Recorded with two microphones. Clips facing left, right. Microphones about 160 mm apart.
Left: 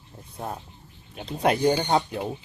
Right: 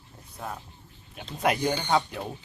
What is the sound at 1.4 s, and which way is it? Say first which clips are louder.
Speech: left 4 dB; 30° left (ahead or behind).